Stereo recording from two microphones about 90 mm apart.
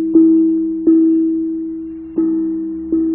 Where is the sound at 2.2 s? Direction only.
55° left (ahead or behind).